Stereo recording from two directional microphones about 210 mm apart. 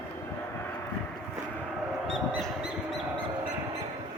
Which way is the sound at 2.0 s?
Centre (ahead or behind).